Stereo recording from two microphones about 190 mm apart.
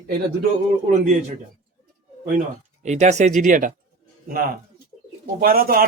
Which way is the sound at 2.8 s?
35° right (ahead or behind).